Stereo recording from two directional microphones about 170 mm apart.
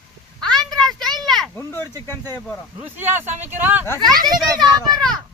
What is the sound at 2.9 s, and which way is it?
Speech, 10° right (ahead or behind).